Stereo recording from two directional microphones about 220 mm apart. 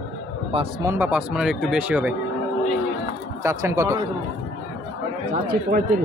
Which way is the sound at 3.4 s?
10° right (ahead or behind).